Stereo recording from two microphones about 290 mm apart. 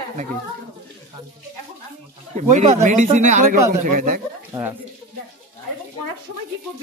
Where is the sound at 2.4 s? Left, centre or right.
Right.